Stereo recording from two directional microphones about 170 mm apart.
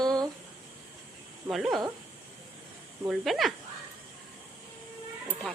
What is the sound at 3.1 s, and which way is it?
Speech, centre (ahead or behind).